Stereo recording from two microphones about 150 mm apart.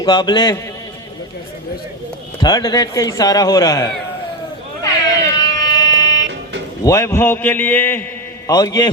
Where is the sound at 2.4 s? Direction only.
25° left (ahead or behind).